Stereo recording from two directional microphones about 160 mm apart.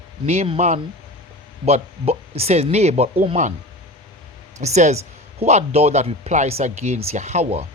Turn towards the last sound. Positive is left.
turn(degrees=-40)  # may be behind; listen again after turning